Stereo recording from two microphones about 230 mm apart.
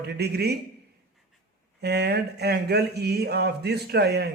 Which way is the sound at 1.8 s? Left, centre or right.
Right.